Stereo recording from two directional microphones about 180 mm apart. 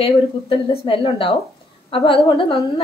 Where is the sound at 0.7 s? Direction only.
30° left (ahead or behind).